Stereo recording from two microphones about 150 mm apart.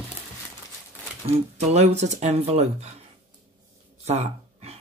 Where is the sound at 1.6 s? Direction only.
45° right (ahead or behind).